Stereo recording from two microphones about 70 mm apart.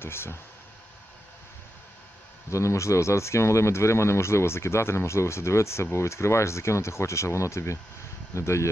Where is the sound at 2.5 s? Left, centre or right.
Left.